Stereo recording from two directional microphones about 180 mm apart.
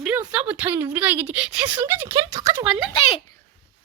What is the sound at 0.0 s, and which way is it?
Speech, 5° right (ahead or behind).